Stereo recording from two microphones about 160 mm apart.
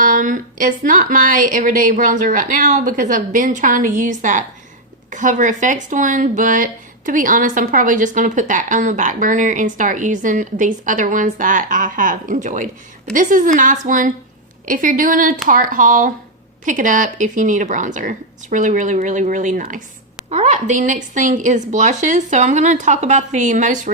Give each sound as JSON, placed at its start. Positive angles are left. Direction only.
{"t": 0.0, "sound": "speech", "side_deg": -55}